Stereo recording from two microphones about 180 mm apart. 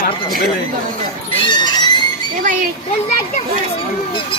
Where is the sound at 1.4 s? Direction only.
25° left (ahead or behind).